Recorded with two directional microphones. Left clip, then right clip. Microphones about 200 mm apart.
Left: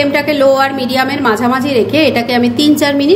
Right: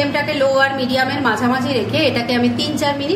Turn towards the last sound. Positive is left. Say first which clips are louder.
# left 8 dB
turn(degrees=40)  # may be behind; listen again after turning